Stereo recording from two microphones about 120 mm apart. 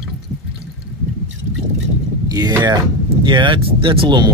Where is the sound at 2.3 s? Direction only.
35° right (ahead or behind).